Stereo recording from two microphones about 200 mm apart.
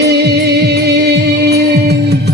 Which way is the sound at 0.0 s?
55° right (ahead or behind).